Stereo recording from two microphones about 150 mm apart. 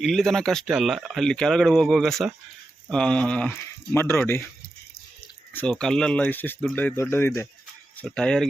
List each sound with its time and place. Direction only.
0.0 s speech: centre (ahead or behind)
5.5 s speech: 5° left (ahead or behind)
8.0 s speech: 5° left (ahead or behind)